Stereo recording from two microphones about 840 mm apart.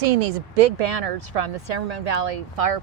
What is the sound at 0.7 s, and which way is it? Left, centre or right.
Speech, right.